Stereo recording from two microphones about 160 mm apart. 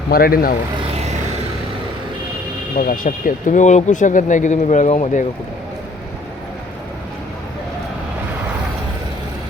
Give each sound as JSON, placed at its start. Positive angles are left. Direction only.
{"t": 0.1, "sound": "speech", "side_deg": 70}
{"t": 2.7, "sound": "speech", "side_deg": 60}